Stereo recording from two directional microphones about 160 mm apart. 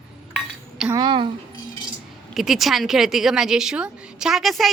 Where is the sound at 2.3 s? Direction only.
Centre (ahead or behind).